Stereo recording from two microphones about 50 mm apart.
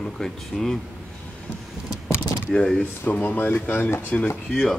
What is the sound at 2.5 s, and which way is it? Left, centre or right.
Speech, centre.